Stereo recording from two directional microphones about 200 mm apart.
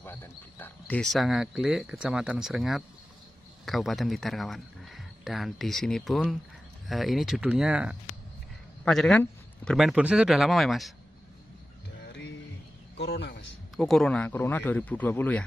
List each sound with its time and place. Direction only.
0.0 s a man's voice: 10° left (ahead or behind)
12.9 s a sound: 55° left (ahead or behind)
13.7 s speech: 5° left (ahead or behind)